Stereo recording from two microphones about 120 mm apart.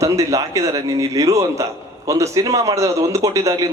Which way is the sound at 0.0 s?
25° right (ahead or behind).